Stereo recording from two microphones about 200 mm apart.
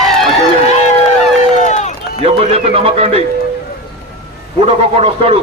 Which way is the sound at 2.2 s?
30° right (ahead or behind).